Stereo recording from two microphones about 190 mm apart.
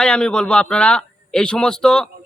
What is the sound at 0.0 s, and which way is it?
A man's voice, 5° left (ahead or behind).